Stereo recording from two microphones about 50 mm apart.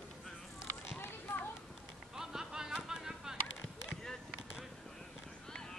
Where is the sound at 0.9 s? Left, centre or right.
Left.